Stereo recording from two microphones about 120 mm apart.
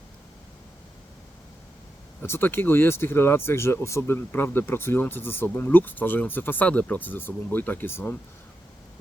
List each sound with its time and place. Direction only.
2.2 s speech: 20° left (ahead or behind)